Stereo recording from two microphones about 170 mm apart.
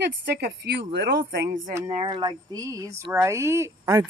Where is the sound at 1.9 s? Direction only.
35° right (ahead or behind).